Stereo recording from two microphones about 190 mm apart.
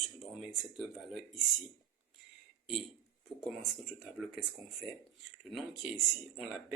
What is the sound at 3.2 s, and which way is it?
Speech, centre (ahead or behind).